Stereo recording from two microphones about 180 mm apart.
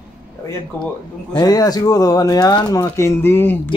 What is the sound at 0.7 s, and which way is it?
Speech, 10° left (ahead or behind).